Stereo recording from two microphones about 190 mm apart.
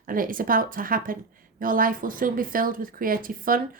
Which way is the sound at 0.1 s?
45° right (ahead or behind).